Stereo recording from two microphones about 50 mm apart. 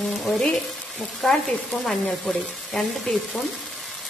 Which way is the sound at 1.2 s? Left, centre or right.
Centre.